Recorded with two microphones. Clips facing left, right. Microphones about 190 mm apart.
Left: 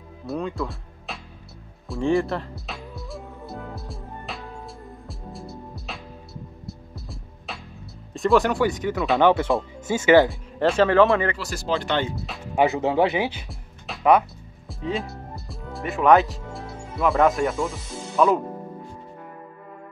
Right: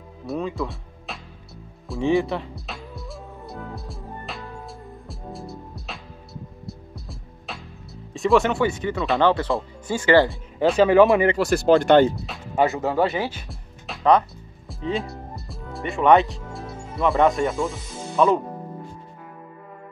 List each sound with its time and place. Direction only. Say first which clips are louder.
0.3 s speech: right 1 dB; centre (ahead or behind)
1.9 s music: right 1 dB; centre (ahead or behind)
8.1 s speech: right 1 dB; centre (ahead or behind)
9.2 s speech: left 2 dB; 15° left (ahead or behind)
10.6 s speech: right 2 dB; 5° right (ahead or behind)
11.3 s speech: right 10 dB; 55° right (ahead or behind)
12.5 s speech: left 1 dB; 15° left (ahead or behind)
13.5 s music: even; 5° left (ahead or behind)